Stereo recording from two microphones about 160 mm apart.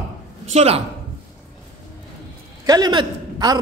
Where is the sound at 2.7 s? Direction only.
25° right (ahead or behind).